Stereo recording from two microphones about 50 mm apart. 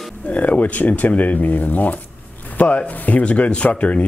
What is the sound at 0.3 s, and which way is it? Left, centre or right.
Speech, left.